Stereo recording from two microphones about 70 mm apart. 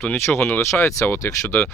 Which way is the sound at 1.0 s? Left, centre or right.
Left.